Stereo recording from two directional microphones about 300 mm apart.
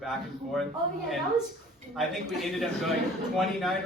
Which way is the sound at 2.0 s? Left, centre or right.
Centre.